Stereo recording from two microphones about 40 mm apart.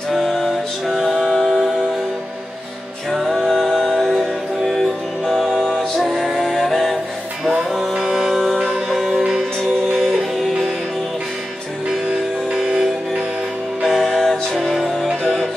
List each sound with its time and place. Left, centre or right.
0.1 s music: centre
3.1 s music: centre
5.2 s music: centre
6.0 s music: centre
6.3 s music: centre
7.9 s music: centre
8.5 s music: centre
8.8 s music: centre
13.8 s music: centre